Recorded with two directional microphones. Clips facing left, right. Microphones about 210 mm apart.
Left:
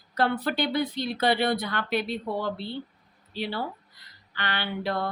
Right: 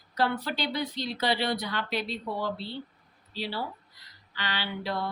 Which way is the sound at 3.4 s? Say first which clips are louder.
Left 3 dB; 55° left (ahead or behind).